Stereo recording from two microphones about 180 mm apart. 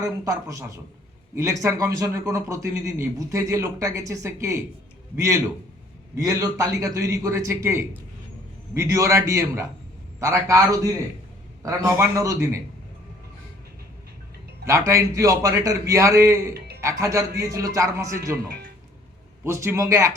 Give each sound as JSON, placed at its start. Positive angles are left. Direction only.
{"t": 0.0, "sound": "a man's voice", "side_deg": -20}
{"t": 14.6, "sound": "a man's voice", "side_deg": -15}
{"t": 19.5, "sound": "a man's voice", "side_deg": -15}